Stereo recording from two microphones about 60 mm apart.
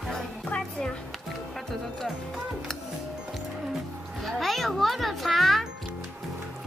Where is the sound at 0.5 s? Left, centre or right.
Centre.